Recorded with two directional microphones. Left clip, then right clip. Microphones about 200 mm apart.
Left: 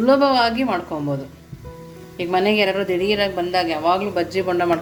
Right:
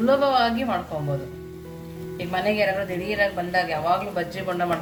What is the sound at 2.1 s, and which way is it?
A woman's voice, 40° left (ahead or behind).